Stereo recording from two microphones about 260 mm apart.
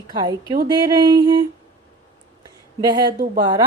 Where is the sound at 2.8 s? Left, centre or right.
Centre.